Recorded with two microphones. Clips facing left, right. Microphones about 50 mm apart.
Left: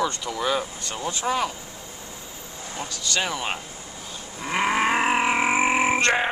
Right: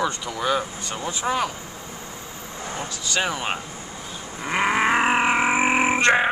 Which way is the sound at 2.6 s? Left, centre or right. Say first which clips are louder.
Right 3 dB; right.